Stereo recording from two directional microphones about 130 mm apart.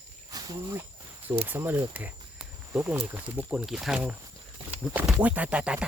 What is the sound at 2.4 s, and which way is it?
Cricket, 5° right (ahead or behind).